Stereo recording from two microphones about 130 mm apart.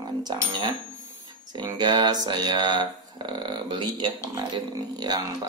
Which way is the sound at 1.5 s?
35° right (ahead or behind).